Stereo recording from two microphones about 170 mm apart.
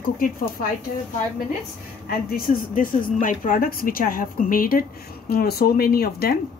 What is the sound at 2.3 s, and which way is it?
A woman's voice, 60° left (ahead or behind).